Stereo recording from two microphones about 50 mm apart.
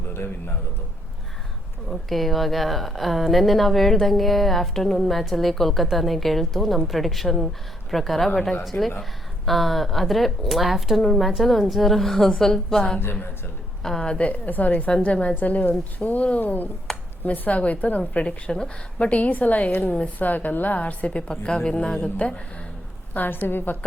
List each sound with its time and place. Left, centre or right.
1.9 s a woman's voice: centre
8.7 s speech: left
9.5 s a woman's voice: centre
14.2 s a woman's voice: left
15.4 s a woman's voice: left
16.9 s a sound: centre
17.2 s a woman's voice: left
19.0 s a woman's voice: left
23.1 s a woman's voice: left